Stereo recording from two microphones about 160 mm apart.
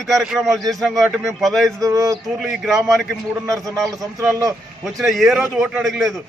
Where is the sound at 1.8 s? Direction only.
20° right (ahead or behind).